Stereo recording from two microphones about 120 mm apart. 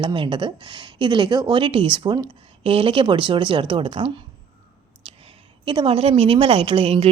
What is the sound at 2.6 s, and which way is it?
Speech, 50° right (ahead or behind).